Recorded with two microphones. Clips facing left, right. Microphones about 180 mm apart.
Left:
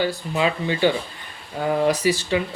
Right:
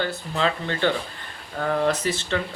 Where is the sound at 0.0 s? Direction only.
10° left (ahead or behind).